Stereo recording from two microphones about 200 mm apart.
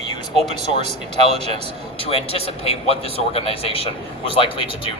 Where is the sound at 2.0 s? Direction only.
30° left (ahead or behind).